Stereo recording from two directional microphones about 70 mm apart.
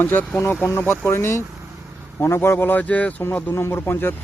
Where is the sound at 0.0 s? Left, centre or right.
Left.